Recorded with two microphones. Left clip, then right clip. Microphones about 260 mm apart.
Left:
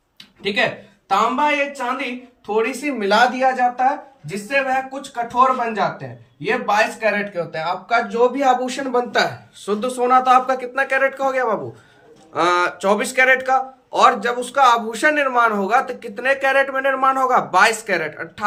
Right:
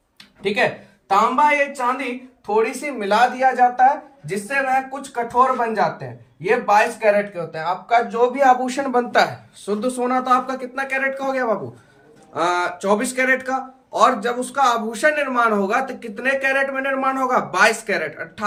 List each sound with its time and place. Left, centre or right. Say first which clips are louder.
0.4 s speech: even; centre
9.6 s speech: left 3 dB; centre